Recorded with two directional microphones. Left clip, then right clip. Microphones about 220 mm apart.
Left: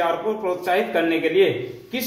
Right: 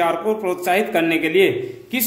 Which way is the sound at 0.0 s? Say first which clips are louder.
Right 3 dB; 50° right (ahead or behind).